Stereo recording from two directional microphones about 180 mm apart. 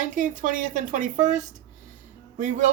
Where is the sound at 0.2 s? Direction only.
45° right (ahead or behind).